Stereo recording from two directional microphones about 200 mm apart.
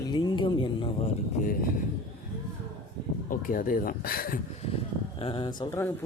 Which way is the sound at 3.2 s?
45° left (ahead or behind).